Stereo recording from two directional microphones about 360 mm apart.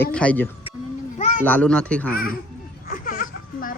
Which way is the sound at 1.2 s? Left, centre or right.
Centre.